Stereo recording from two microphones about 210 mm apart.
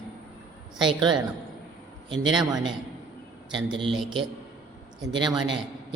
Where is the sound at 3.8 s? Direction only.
Centre (ahead or behind).